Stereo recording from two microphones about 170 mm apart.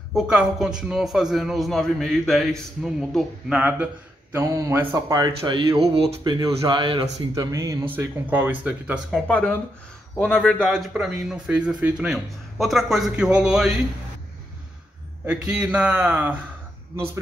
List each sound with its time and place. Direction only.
0.1 s a man's voice: 5° right (ahead or behind); by 6.3 s 35° right (ahead or behind)
6.4 s speech: 25° right (ahead or behind); by 9.2 s 5° right (ahead or behind)
9.3 s a man's voice: 5° left (ahead or behind)
10.6 s a man's voice: 5° right (ahead or behind)
15.2 s speech: 5° right (ahead or behind)